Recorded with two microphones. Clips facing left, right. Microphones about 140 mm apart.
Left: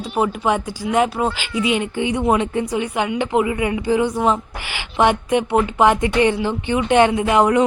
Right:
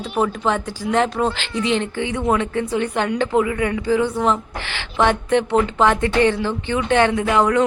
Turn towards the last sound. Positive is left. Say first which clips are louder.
# left 2 dB
turn(degrees=20)  # may be behind; listen again after turning